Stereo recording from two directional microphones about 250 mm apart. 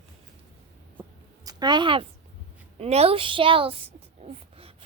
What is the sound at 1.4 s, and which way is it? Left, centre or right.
A woman's voice, centre.